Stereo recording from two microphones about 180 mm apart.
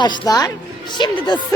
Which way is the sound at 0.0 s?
20° left (ahead or behind).